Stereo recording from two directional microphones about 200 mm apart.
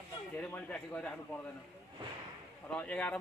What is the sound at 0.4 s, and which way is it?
Speech, 5° left (ahead or behind).